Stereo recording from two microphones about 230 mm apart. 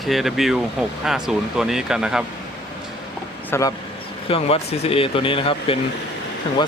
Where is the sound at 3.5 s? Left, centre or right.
Centre.